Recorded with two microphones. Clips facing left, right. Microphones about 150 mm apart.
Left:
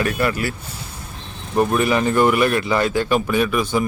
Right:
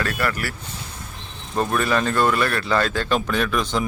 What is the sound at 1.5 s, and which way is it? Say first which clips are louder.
Speech: left 4 dB; 15° left (ahead or behind).